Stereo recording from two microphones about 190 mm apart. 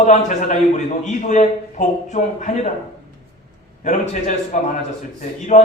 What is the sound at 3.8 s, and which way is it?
A man's voice, 40° left (ahead or behind).